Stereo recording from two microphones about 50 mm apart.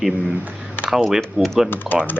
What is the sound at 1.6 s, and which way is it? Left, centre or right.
Speech, left.